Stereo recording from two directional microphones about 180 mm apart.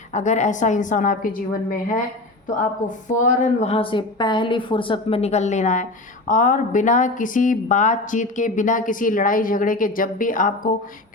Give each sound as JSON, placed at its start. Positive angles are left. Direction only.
{"t": 0.1, "sound": "speech", "side_deg": 40}
{"t": 2.6, "sound": "a woman's voice", "side_deg": 45}